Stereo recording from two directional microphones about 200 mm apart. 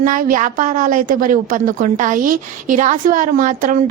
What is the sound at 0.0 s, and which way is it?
A woman's voice, 40° right (ahead or behind).